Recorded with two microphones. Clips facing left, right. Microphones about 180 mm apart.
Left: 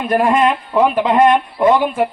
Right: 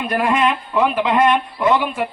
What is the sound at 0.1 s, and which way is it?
Speech, 45° left (ahead or behind).